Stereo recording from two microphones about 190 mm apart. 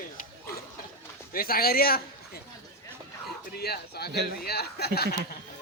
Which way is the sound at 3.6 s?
55° left (ahead or behind).